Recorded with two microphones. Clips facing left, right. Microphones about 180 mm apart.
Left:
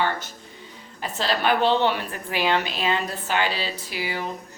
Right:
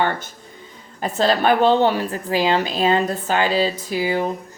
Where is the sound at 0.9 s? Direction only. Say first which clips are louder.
Right 7 dB; 50° right (ahead or behind).